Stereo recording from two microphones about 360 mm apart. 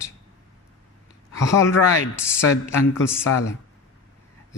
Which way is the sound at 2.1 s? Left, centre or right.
Centre.